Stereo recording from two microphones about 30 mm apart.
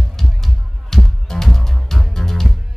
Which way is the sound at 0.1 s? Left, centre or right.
Centre.